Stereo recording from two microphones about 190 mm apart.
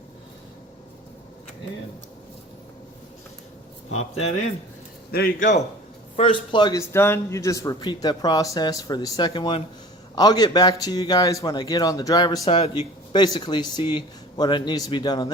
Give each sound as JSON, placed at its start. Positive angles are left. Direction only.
{"t": 4.1, "sound": "speech", "side_deg": 35}
{"t": 5.1, "sound": "a man's voice", "side_deg": 50}
{"t": 6.1, "sound": "a man's voice", "side_deg": 30}